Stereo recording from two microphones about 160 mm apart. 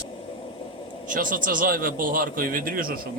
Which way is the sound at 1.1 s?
60° right (ahead or behind).